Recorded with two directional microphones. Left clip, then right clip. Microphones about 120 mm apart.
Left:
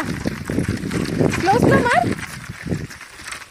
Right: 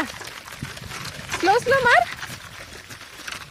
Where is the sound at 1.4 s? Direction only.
20° left (ahead or behind).